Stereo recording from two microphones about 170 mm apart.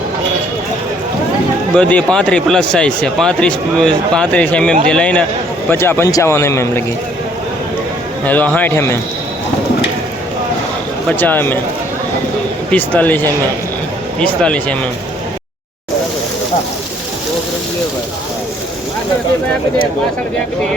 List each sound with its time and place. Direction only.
1.7 s a man's voice: 5° left (ahead or behind)
8.2 s a man's voice: 10° left (ahead or behind)
11.2 s a man's voice: 10° left (ahead or behind)
12.7 s a man's voice: 10° left (ahead or behind)